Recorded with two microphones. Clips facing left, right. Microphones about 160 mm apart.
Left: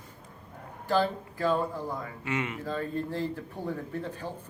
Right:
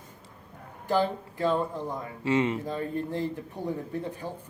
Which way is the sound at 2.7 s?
15° right (ahead or behind).